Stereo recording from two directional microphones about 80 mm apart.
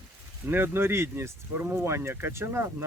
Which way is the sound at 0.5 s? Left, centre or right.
Right.